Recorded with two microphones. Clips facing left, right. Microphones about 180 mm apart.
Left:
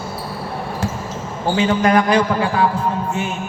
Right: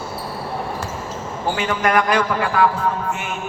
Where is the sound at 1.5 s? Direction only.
30° left (ahead or behind).